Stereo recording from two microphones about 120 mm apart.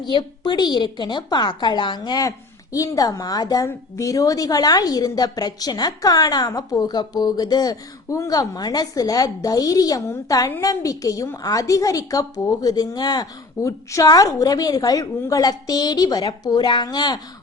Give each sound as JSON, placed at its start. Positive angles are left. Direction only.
{"t": 0.0, "sound": "a woman's voice", "side_deg": 40}